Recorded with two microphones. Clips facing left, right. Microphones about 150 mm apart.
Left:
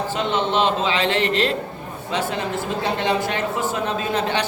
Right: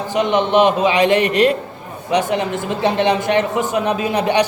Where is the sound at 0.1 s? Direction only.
15° right (ahead or behind).